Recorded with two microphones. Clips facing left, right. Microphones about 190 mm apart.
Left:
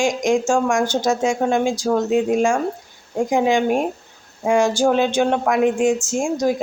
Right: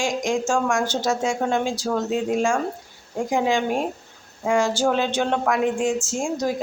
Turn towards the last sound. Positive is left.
turn(degrees=15)  # may be behind; listen again after turning